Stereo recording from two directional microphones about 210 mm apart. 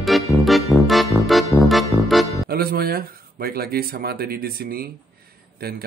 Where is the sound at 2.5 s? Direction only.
45° right (ahead or behind).